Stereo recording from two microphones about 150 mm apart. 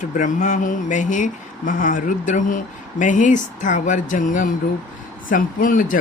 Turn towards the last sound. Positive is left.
turn(degrees=65)  # may be behind; listen again after turning